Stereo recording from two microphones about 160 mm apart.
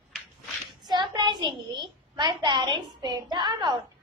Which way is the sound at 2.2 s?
30° right (ahead or behind).